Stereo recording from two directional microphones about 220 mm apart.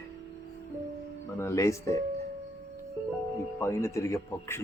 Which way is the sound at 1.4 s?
10° left (ahead or behind).